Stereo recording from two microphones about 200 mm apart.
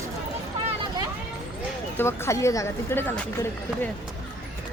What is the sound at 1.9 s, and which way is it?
Speech, 10° left (ahead or behind).